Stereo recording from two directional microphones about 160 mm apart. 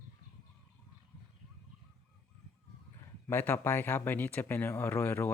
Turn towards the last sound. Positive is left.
turn(degrees=15)  # may be behind; listen again after turning